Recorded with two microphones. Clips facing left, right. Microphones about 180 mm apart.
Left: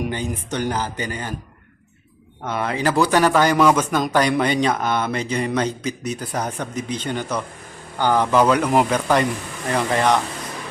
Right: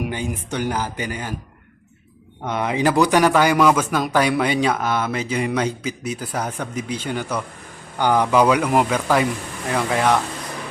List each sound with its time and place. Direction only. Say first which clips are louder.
0.0 s speech: even; 10° right (ahead or behind)
2.4 s speech: right 2 dB; 15° right (ahead or behind)